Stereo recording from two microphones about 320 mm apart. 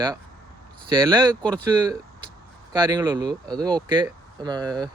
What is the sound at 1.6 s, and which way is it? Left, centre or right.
Speech, centre.